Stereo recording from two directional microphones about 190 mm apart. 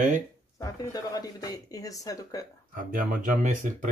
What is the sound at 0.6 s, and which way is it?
Speech, 20° left (ahead or behind).